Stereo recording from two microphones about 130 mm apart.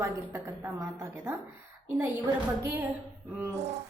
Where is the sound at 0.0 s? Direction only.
20° right (ahead or behind).